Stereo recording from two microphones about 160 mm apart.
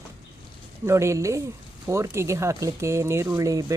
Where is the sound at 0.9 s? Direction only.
20° right (ahead or behind).